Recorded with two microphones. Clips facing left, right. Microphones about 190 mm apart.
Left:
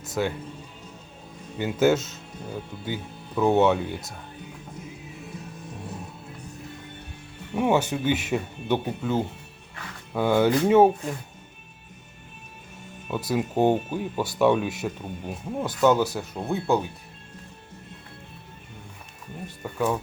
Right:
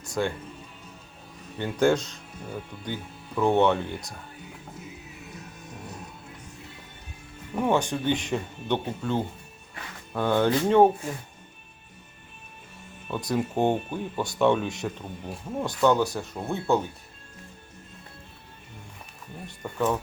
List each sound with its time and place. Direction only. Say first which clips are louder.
0.1 s speech: left 1 dB; 5° left (ahead or behind)
1.5 s speech: left 2 dB; 5° left (ahead or behind)
7.5 s speech: left 2 dB; 5° left (ahead or behind)
13.1 s speech: left 1 dB; 5° left (ahead or behind)
19.6 s speech: even; 5° left (ahead or behind)